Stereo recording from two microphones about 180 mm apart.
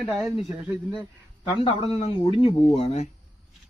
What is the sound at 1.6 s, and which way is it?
Speech, 35° left (ahead or behind).